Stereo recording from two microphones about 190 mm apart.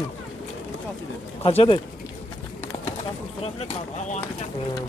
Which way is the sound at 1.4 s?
30° left (ahead or behind).